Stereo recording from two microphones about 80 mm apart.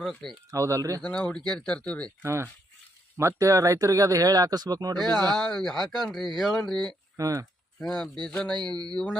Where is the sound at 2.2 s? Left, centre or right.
Right.